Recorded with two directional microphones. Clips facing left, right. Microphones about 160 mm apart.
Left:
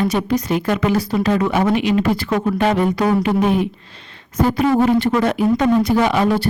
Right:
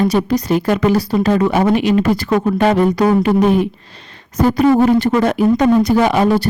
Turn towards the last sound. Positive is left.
turn(degrees=-45)  # may be behind; listen again after turning